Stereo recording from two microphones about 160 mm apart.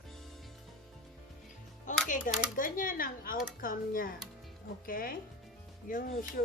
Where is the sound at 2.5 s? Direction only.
60° left (ahead or behind).